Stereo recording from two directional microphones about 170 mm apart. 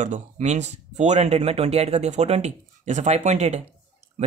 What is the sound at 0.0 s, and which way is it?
Speech, 45° right (ahead or behind).